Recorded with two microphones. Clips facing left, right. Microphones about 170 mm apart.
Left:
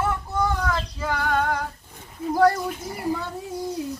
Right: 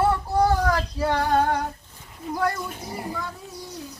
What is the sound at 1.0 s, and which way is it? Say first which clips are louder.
Female singing: right 3 dB; 30° right (ahead or behind).